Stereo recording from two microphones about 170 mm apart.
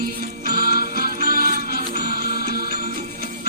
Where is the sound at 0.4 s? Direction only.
60° right (ahead or behind).